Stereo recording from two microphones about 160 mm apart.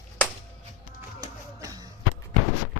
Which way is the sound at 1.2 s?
25° right (ahead or behind).